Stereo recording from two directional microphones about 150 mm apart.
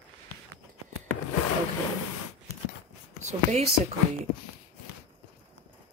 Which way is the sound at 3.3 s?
50° right (ahead or behind).